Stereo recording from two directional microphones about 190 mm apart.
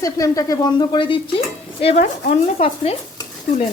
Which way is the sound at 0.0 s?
20° left (ahead or behind).